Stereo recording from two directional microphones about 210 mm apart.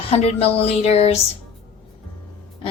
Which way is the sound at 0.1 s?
30° left (ahead or behind).